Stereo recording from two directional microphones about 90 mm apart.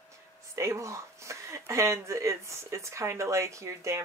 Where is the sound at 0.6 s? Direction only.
35° right (ahead or behind).